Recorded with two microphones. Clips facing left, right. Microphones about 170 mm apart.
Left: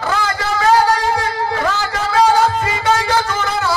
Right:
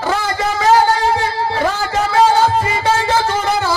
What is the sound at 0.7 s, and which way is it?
Music, 30° right (ahead or behind).